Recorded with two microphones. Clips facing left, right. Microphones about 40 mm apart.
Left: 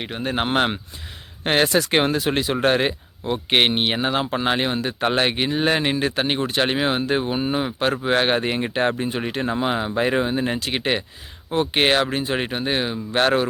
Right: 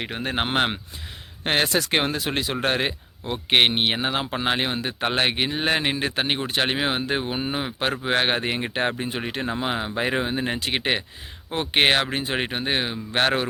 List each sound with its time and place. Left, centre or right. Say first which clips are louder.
0.5 s speech: left 3 dB; centre
1.5 s speech: left 3 dB; centre; by 13.5 s right